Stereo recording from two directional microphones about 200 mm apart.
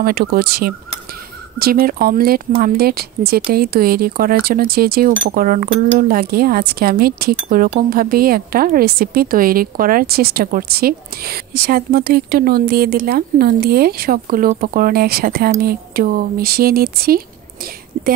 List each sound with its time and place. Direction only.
0.0 s speech: 50° right (ahead or behind)